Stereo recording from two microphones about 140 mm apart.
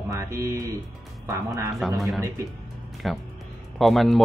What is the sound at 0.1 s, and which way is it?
Speech, 20° right (ahead or behind).